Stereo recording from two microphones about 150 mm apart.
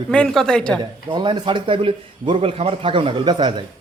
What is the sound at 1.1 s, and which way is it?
Speech, 30° right (ahead or behind).